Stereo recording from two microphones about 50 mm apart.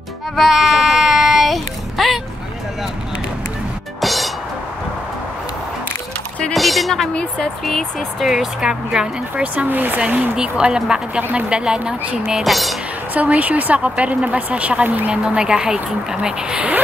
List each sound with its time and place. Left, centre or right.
0.4 s speech: centre
4.0 s music: centre
6.5 s a woman's voice: centre
9.7 s speech: right
10.3 s speech: centre
12.4 s a woman's voice: centre
13.1 s speech: right
15.2 s speech: centre